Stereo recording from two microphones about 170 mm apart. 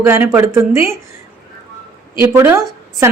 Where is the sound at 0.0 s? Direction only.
15° right (ahead or behind).